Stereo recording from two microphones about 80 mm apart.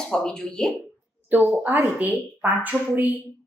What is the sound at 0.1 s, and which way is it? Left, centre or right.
Speech, centre.